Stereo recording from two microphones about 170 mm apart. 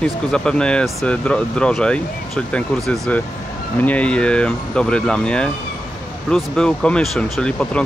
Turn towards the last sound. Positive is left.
turn(degrees=5)  # may be behind; listen again after turning